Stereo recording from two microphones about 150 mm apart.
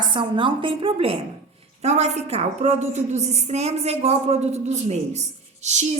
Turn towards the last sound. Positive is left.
turn(degrees=-50)  # may be behind; listen again after turning